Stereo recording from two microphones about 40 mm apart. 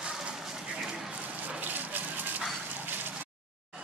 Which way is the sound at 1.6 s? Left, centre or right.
Right.